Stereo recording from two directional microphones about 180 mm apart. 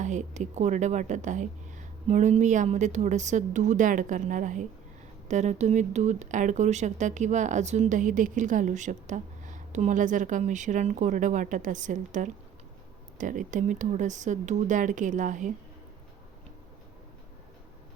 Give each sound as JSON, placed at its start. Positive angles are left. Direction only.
{"t": 0.0, "sound": "a woman's voice", "side_deg": -40}